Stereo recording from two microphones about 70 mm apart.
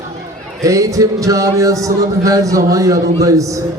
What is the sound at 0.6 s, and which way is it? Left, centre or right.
A man's voice, right.